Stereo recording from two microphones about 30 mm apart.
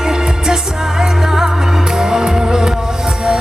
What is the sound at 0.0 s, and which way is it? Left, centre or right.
Music, right.